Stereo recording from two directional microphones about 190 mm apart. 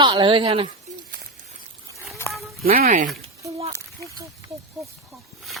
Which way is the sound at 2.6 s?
50° right (ahead or behind).